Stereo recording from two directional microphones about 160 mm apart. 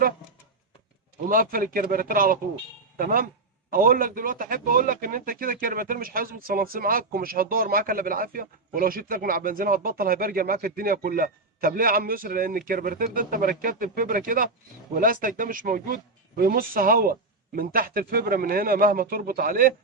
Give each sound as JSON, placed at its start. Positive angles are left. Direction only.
{"t": 1.3, "sound": "a man's voice", "side_deg": -65}